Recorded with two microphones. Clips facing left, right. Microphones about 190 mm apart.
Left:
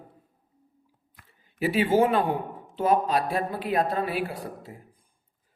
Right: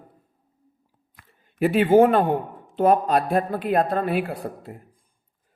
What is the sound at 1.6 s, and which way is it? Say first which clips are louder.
Speech: right 6 dB; 55° right (ahead or behind).